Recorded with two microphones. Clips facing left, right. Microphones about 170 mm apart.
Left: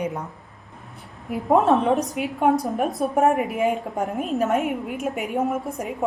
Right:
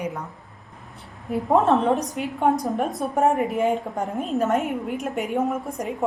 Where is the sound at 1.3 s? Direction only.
5° left (ahead or behind).